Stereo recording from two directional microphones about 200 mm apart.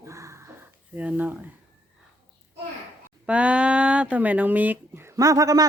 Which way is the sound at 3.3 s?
5° right (ahead or behind).